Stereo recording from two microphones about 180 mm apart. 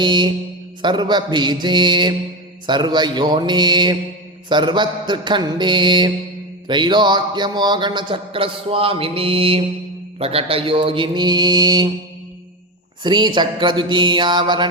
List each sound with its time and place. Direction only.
0.0 s a man's voice: 25° right (ahead or behind)
13.0 s a man's voice: 25° right (ahead or behind)